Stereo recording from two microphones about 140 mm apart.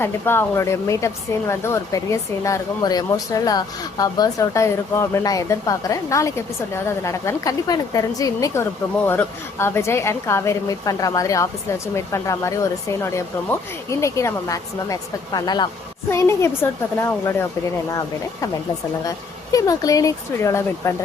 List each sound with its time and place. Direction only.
0.0 s speech: 15° left (ahead or behind)
16.0 s a woman's voice: 20° left (ahead or behind)
19.0 s speech: 25° left (ahead or behind)